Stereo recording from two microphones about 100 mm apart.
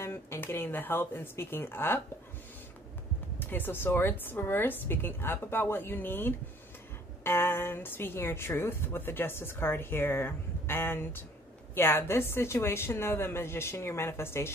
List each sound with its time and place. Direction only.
0.0 s a woman's voice: 30° left (ahead or behind)
3.3 s a woman's voice: 20° left (ahead or behind)